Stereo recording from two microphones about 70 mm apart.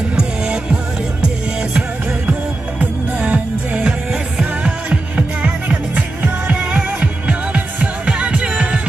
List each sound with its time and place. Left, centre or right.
0.1 s music: centre